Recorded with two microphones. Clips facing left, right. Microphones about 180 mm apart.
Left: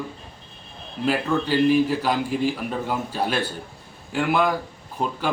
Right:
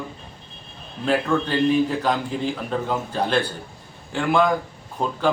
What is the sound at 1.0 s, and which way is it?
A man's voice, 5° left (ahead or behind).